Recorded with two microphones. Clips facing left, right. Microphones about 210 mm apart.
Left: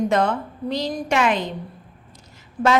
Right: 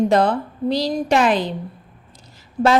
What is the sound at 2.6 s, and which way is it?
Speech, 25° right (ahead or behind).